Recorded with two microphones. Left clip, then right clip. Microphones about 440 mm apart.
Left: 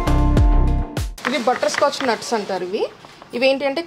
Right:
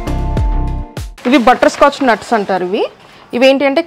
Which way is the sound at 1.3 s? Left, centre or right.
Right.